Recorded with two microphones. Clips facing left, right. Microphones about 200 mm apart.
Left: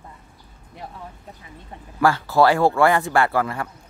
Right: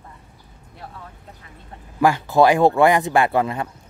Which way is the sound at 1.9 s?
15° right (ahead or behind).